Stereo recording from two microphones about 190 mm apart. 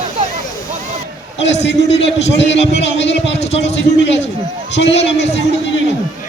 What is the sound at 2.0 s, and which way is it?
A man's voice, 65° left (ahead or behind).